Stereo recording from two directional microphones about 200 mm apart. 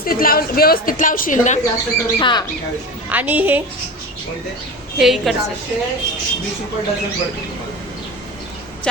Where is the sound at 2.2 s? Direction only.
20° left (ahead or behind).